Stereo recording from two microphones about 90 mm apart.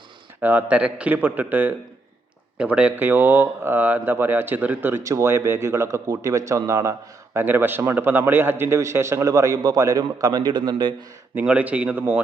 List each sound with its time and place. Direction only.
0.4 s speech: 15° right (ahead or behind)
5.0 s a man's voice: 35° right (ahead or behind)
7.3 s a man's voice: 25° right (ahead or behind); by 10.9 s 60° right (ahead or behind)
11.3 s speech: 15° right (ahead or behind)